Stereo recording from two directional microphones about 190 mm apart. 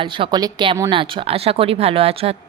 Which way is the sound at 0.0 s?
25° right (ahead or behind).